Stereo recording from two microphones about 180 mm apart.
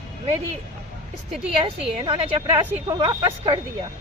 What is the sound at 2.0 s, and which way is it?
Speech, 25° right (ahead or behind).